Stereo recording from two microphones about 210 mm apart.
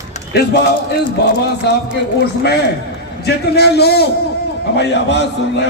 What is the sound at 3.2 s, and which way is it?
A man's voice, 50° left (ahead or behind).